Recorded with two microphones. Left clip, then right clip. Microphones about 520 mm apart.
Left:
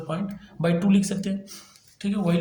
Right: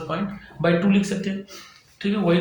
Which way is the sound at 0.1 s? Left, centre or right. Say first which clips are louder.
Right 5 dB; left.